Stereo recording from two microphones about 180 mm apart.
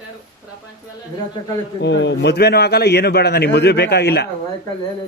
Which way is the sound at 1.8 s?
75° left (ahead or behind).